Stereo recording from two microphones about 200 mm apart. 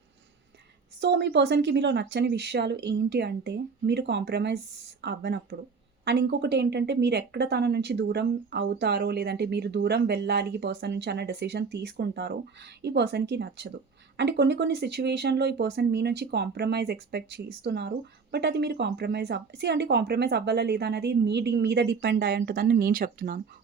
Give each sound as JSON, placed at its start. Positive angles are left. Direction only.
{"t": 1.0, "sound": "speech", "side_deg": -60}